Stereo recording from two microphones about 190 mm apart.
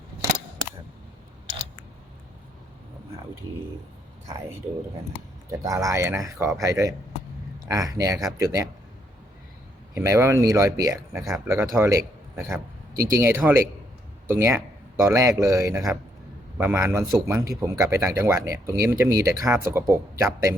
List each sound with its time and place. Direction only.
5.5 s speech: 15° right (ahead or behind)
9.9 s a man's voice: 15° right (ahead or behind)